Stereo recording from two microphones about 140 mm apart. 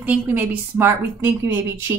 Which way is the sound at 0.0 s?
15° right (ahead or behind).